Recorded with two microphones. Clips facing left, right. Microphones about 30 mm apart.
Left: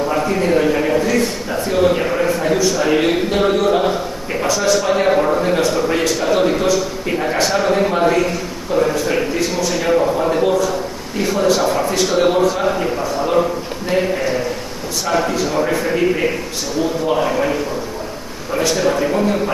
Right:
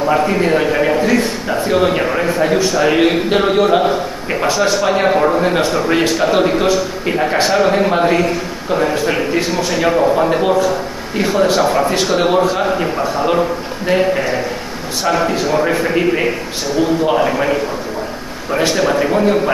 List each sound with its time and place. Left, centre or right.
0.0 s a man's voice: right